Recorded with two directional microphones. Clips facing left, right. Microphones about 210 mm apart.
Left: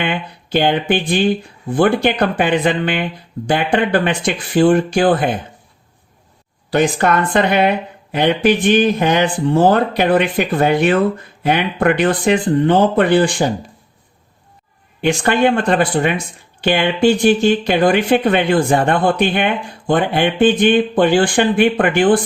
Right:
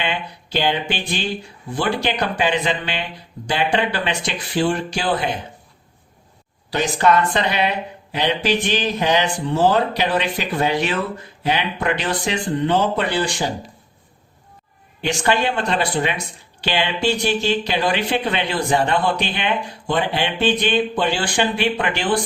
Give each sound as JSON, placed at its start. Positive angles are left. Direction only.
{"t": 0.0, "sound": "speech", "side_deg": 55}
{"t": 6.7, "sound": "speech", "side_deg": 55}
{"t": 15.0, "sound": "speech", "side_deg": 55}